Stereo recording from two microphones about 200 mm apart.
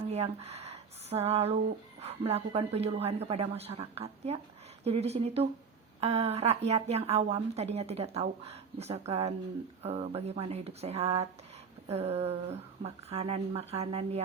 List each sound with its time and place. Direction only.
0.1 s a woman's voice: 30° right (ahead or behind)